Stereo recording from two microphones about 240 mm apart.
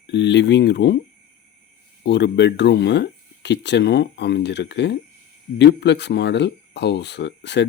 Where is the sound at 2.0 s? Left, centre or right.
Left.